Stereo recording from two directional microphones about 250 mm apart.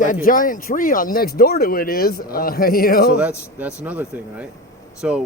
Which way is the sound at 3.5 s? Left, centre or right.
Centre.